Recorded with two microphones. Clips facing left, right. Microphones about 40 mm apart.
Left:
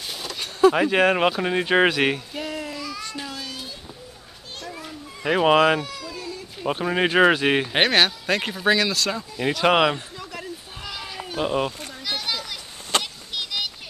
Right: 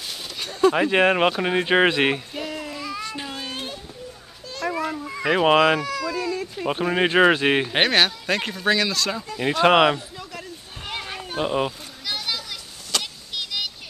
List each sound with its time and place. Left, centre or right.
0.1 s a sound: centre
1.0 s speech: centre
2.3 s child singing: centre
3.2 s a sound: right
5.2 s speech: centre
5.8 s baby cry: right
6.6 s speech: centre
9.5 s speech: centre
10.8 s a sound: right
11.4 s speech: centre
12.1 s a sound: centre
13.0 s vehicle: centre